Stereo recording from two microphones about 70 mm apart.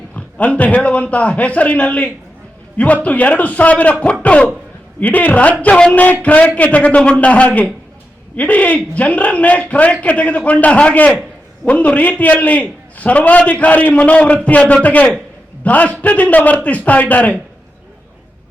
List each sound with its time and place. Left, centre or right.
0.2 s a man's voice: centre
4.0 s cough: centre
4.9 s a man's voice: left